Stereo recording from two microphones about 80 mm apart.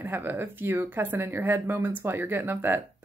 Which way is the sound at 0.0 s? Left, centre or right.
Right.